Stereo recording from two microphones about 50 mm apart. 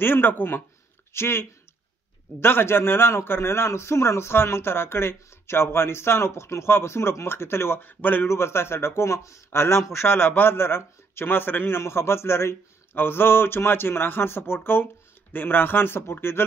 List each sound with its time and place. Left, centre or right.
0.0 s a man's voice: left
8.0 s a man's voice: left
8.3 s a man's voice: left
10.0 s speech: left